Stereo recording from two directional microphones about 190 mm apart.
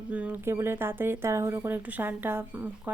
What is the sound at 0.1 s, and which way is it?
Speech, 10° right (ahead or behind).